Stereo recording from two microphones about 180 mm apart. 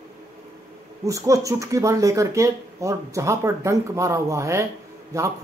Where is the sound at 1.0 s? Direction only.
15° right (ahead or behind).